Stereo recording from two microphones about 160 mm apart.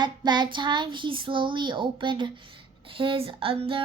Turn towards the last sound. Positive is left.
turn(degrees=-35)  # may be behind; listen again after turning